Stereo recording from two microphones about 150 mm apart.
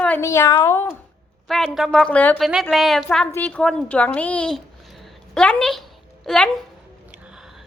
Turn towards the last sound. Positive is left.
turn(degrees=-5)  # may be behind; listen again after turning